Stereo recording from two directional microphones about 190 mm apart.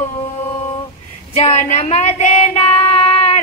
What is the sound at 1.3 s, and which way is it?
Child singing, 35° left (ahead or behind).